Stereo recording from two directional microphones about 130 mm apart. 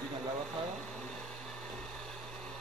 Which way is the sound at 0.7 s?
5° left (ahead or behind).